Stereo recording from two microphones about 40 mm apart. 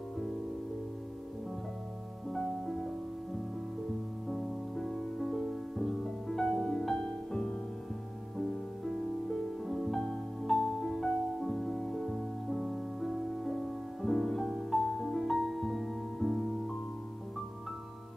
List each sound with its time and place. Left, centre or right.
2.2 s music: centre
4.3 s music: centre
8.4 s music: centre
14.4 s music: centre